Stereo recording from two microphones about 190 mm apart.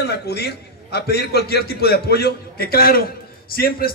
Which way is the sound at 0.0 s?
60° left (ahead or behind).